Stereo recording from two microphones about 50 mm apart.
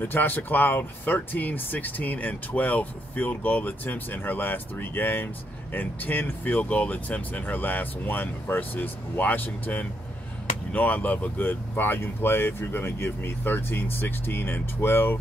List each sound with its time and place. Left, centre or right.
0.0 s speech: left